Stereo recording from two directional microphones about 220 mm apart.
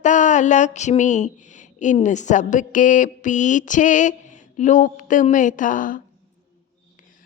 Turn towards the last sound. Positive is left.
turn(degrees=35)  # may be behind; listen again after turning